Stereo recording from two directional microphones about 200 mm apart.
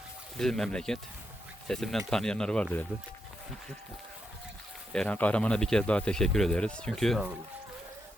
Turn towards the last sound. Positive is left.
turn(degrees=0)  # may be behind; listen again after turning